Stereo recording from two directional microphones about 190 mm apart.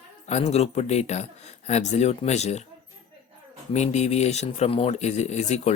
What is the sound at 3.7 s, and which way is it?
Speech, 35° left (ahead or behind).